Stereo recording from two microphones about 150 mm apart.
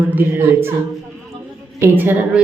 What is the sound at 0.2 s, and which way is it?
Speech, 15° right (ahead or behind).